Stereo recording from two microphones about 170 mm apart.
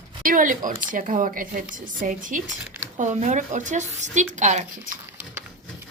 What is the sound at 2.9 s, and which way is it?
Speech, 45° right (ahead or behind).